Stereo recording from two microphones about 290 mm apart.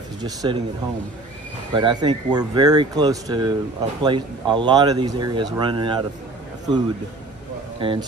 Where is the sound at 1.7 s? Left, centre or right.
Centre.